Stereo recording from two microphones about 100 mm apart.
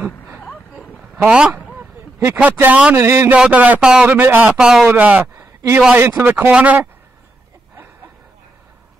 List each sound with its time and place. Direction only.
1.2 s speech: 10° right (ahead or behind)
1.8 s a sound: 25° right (ahead or behind)
2.3 s speech: 15° right (ahead or behind)
3.0 s a man's voice: 30° right (ahead or behind)
3.3 s speech: 15° right (ahead or behind)
4.1 s a man's voice: 20° right (ahead or behind)
4.6 s a man's voice: 5° right (ahead or behind)